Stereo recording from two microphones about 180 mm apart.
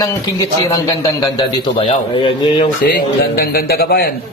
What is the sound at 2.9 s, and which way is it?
A man's voice, 55° left (ahead or behind).